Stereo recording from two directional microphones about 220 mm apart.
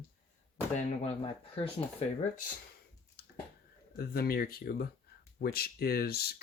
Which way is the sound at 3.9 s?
45° left (ahead or behind).